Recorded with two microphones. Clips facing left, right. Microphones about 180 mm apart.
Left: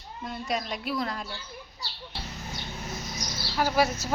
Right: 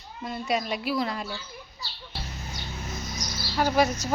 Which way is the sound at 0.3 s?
5° right (ahead or behind).